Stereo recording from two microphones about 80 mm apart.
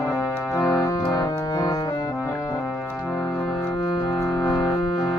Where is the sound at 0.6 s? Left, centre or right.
Left.